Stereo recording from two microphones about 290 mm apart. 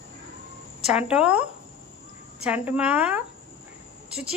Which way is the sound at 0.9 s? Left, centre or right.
Centre.